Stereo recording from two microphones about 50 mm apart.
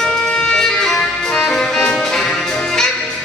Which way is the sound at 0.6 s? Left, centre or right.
Centre.